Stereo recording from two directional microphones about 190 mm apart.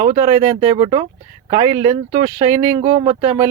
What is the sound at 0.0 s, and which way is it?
Speech, 35° right (ahead or behind).